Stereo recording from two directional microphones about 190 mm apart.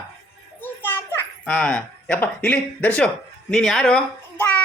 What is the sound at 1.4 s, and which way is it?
Speech, 5° left (ahead or behind).